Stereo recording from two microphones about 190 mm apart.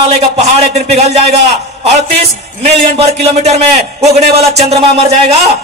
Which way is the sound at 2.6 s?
35° right (ahead or behind).